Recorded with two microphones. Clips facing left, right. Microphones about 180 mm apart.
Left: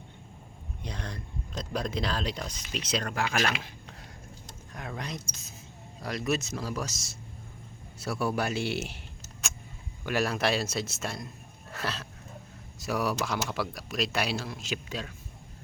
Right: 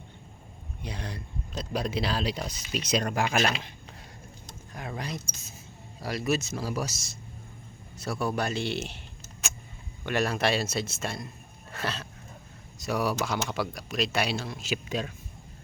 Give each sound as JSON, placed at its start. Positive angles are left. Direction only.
{"t": 0.8, "sound": "speech", "side_deg": -10}
{"t": 4.7, "sound": "speech", "side_deg": -5}
{"t": 7.9, "sound": "speech", "side_deg": 5}
{"t": 10.1, "sound": "speech", "side_deg": 0}
{"t": 14.8, "sound": "speech", "side_deg": -20}